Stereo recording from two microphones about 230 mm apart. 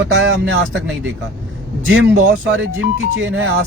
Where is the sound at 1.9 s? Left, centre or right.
Right.